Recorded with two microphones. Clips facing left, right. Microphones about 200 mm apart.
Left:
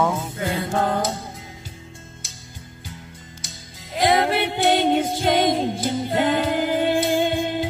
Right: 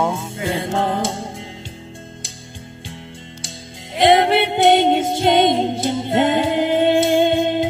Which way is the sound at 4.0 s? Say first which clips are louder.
Right 5 dB; 25° right (ahead or behind).